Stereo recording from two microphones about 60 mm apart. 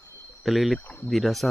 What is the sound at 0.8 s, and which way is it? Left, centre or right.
Speech, left.